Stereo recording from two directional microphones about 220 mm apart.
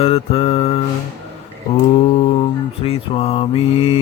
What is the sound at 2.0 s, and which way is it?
Mantra, 25° left (ahead or behind).